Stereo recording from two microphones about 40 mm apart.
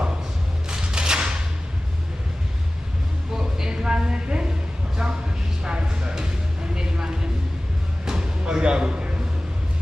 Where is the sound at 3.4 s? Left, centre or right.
Centre.